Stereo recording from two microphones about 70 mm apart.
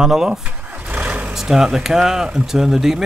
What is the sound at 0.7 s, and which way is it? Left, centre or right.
Vehicle, right.